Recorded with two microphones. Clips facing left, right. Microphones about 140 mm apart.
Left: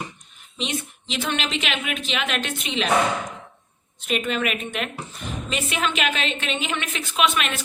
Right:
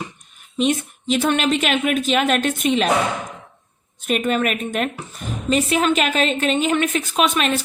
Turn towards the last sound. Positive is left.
turn(degrees=-35)  # may be behind; listen again after turning